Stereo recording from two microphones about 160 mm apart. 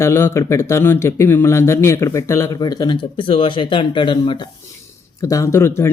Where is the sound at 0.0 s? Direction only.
15° left (ahead or behind).